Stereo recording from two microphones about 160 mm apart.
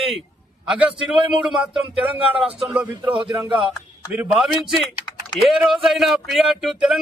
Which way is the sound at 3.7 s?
5° right (ahead or behind).